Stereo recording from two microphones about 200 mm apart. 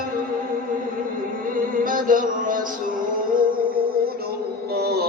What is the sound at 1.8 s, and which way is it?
Speech, 45° right (ahead or behind).